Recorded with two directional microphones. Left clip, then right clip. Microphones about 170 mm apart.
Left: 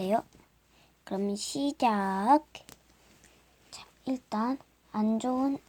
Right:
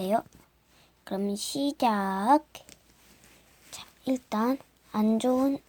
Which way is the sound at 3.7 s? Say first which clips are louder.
Right 5 dB; 15° right (ahead or behind).